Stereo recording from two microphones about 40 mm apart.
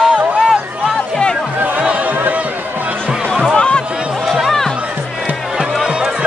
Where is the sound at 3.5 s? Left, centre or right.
Left.